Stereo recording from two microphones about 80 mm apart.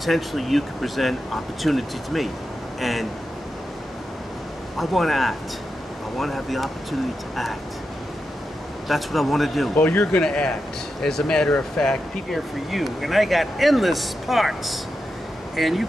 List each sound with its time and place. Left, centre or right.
0.0 s speech: centre
4.7 s speech: centre
8.8 s speech: centre
9.8 s speech: centre